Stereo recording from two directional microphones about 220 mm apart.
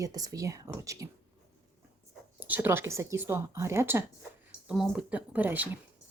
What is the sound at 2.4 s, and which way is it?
Speech, 10° right (ahead or behind).